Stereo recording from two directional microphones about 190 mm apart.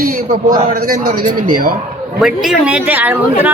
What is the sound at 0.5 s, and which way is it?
A man's voice, 45° right (ahead or behind).